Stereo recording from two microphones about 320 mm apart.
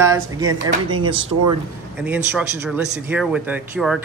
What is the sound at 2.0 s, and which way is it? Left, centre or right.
A man's voice, centre.